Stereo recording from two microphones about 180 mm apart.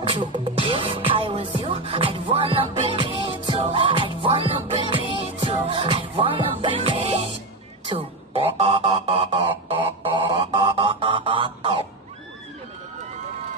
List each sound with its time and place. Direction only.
0.0 s music: 25° right (ahead or behind)
7.9 s a sound: 30° right (ahead or behind)
10.1 s music: 25° right (ahead or behind)